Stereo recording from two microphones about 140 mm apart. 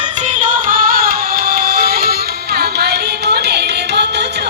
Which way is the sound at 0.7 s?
85° right.